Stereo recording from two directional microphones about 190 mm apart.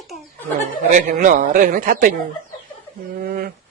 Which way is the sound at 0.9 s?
40° right (ahead or behind).